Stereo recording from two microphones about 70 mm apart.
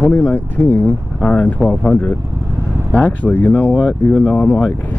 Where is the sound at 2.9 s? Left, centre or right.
Left.